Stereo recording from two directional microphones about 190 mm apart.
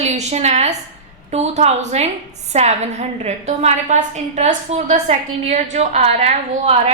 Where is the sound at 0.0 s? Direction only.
35° right (ahead or behind).